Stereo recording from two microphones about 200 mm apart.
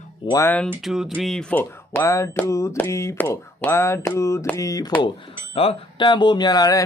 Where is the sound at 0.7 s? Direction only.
Centre (ahead or behind); by 4.9 s 20° left (ahead or behind).